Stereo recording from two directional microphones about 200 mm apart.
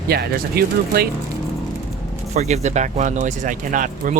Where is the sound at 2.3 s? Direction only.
35° right (ahead or behind).